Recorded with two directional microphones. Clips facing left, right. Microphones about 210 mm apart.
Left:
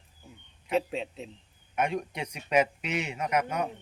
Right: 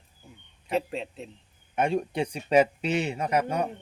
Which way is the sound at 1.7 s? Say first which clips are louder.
Right 4 dB; 30° right (ahead or behind).